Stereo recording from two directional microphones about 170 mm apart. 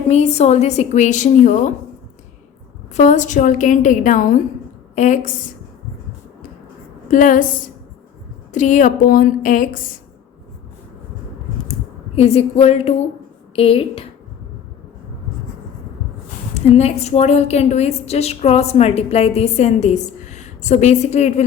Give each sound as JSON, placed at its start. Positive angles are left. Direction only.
{"t": 0.1, "sound": "a woman's voice", "side_deg": 40}
{"t": 2.9, "sound": "a woman's voice", "side_deg": 45}
{"t": 7.1, "sound": "a woman's voice", "side_deg": 50}
{"t": 8.5, "sound": "a woman's voice", "side_deg": 45}
{"t": 12.1, "sound": "a woman's voice", "side_deg": 35}
{"t": 16.6, "sound": "a woman's voice", "side_deg": 40}